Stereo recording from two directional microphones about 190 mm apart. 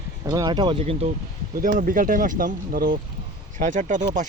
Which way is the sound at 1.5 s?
45° right (ahead or behind).